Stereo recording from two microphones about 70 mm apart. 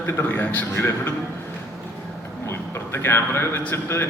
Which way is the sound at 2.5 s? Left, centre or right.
Left.